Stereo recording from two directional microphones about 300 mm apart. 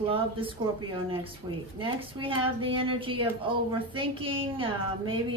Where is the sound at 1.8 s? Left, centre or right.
Centre.